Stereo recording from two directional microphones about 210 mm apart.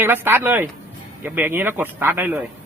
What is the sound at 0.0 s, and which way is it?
Speech, 10° right (ahead or behind).